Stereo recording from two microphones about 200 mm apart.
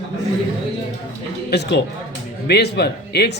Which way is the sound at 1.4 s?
55° left (ahead or behind).